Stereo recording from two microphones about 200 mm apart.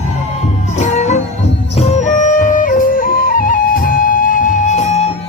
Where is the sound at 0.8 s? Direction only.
35° left (ahead or behind).